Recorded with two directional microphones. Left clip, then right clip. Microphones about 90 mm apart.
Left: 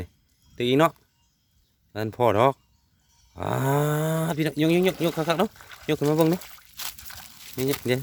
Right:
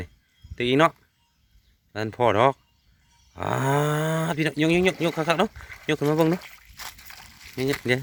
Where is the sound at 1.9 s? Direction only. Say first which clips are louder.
Even; 20° left (ahead or behind); by 6.4 s 5° left (ahead or behind).